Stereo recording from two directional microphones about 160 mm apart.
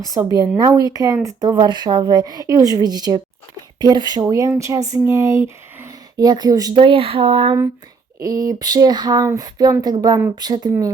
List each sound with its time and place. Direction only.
0.3 s speech: 25° right (ahead or behind)
8.2 s speech: 20° right (ahead or behind)